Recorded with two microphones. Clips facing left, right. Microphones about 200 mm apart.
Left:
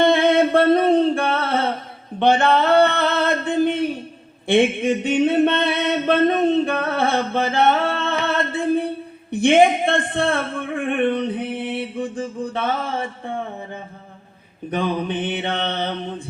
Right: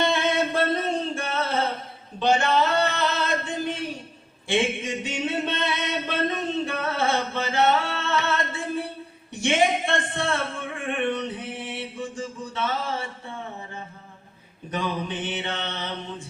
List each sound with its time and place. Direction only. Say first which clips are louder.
0.0 s music: left 8 dB; 55° left (ahead or behind)
2.1 s male singing: left 5 dB; 60° left (ahead or behind)
4.4 s a sound: left 8 dB; 60° left (ahead or behind)
9.3 s mantra: left 8 dB; 60° left (ahead or behind)
11.0 s music: left 6 dB; 55° left (ahead or behind)
14.7 s mantra: left 6 dB; 60° left (ahead or behind)